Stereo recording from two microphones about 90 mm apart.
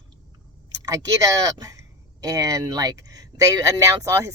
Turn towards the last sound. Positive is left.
turn(degrees=-35)  # may be behind; listen again after turning